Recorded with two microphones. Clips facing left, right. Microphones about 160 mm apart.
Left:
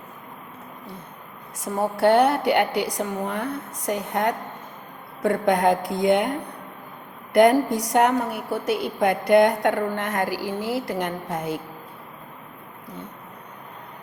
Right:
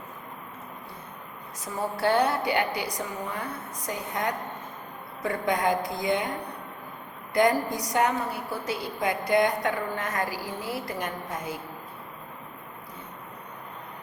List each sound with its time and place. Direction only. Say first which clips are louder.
1.6 s a woman's voice: left 7 dB; 65° left (ahead or behind)
7.3 s a woman's voice: left 7 dB; 70° left (ahead or behind)